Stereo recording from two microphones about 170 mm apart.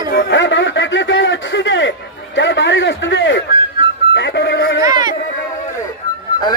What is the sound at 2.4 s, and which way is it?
A man's voice, 90° left.